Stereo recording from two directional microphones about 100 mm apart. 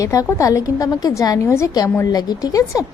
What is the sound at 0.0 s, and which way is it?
A woman's voice, 35° left (ahead or behind).